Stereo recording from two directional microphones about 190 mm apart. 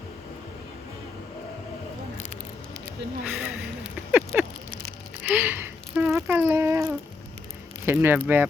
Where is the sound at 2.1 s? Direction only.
40° left (ahead or behind).